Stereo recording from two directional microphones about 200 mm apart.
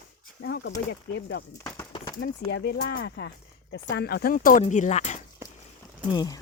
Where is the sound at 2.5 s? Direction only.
60° left (ahead or behind); by 5.1 s 35° left (ahead or behind).